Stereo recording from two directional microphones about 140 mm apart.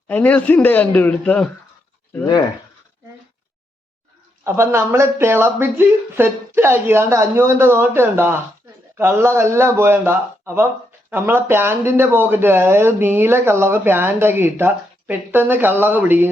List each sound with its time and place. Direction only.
0.1 s a man's voice: 10° left (ahead or behind)
4.4 s speech: 20° right (ahead or behind)